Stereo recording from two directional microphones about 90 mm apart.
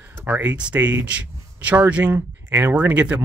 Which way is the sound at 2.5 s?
25° right (ahead or behind).